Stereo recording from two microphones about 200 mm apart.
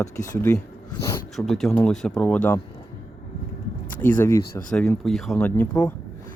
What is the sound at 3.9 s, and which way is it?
Speech, 10° left (ahead or behind).